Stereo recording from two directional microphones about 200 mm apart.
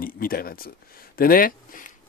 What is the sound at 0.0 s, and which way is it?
Speech, 45° left (ahead or behind).